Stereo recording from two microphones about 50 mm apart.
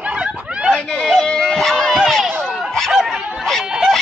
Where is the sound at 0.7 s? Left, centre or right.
Centre.